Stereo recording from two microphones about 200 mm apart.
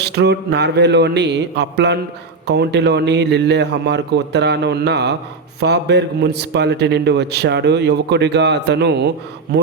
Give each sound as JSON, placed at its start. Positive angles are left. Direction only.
{"t": 0.0, "sound": "a man's voice", "side_deg": -55}